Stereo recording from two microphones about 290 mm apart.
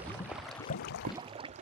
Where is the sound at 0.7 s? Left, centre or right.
Left.